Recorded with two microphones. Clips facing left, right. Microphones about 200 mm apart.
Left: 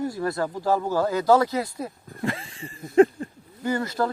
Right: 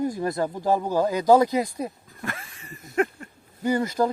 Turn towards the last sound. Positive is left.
turn(degrees=-15)  # may be behind; listen again after turning